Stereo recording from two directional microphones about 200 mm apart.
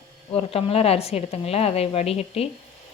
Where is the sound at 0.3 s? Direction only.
30° left (ahead or behind).